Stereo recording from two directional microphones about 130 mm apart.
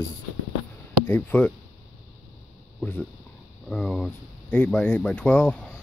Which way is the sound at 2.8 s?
10° left (ahead or behind).